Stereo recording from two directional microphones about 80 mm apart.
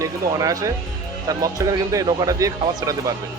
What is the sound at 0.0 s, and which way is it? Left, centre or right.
Speech, right.